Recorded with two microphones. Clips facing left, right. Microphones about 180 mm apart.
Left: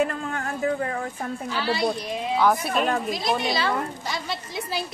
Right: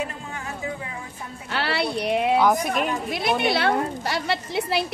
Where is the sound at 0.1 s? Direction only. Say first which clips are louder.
Left 5 dB; 55° left (ahead or behind).